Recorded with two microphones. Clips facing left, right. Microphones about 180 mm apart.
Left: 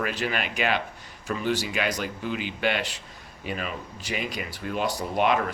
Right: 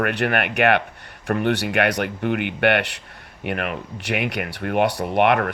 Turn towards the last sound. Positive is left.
turn(degrees=-65)  # may be behind; listen again after turning